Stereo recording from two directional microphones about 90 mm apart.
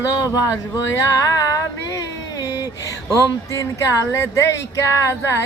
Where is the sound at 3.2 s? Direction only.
35° left (ahead or behind).